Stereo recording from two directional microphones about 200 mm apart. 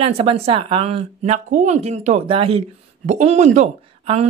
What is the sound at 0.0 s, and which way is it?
A woman's voice, 30° right (ahead or behind).